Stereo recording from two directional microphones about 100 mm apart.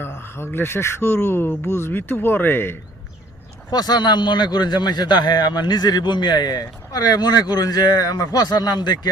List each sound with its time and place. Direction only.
0.0 s a man's voice: 25° left (ahead or behind)
3.7 s a man's voice: 45° left (ahead or behind)